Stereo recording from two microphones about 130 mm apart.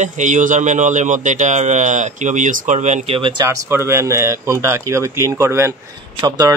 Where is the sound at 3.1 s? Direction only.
40° right (ahead or behind).